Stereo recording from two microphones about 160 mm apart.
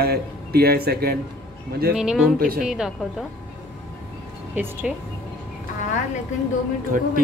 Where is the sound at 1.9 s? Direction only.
5° right (ahead or behind).